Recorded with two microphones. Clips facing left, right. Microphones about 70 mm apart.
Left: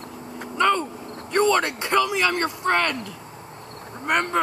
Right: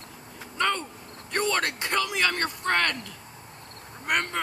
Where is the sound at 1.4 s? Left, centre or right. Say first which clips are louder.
Left 7 dB; left.